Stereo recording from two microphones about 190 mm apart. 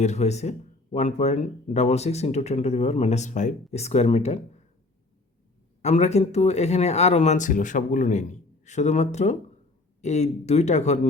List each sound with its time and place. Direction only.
0.0 s speech: 35° left (ahead or behind)
5.8 s speech: 35° left (ahead or behind)